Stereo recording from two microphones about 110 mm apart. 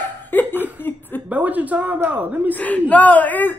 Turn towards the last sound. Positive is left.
turn(degrees=15)  # may be behind; listen again after turning